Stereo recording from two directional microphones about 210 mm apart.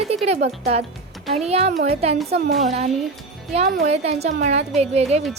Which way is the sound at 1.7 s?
45° right (ahead or behind).